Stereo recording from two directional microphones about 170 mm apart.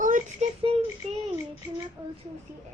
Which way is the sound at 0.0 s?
50° right (ahead or behind).